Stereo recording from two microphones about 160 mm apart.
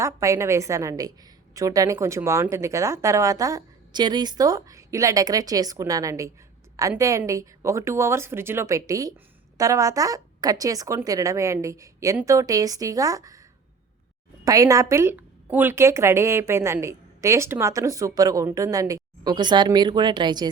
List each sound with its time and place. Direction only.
0.0 s a woman's voice: 20° right (ahead or behind)
14.4 s a woman's voice: 20° right (ahead or behind)